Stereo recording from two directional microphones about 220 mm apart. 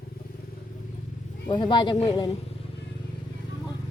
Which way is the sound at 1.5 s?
20° left (ahead or behind).